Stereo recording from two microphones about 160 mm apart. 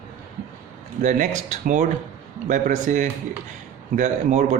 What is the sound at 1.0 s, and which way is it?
Speech, 50° right (ahead or behind).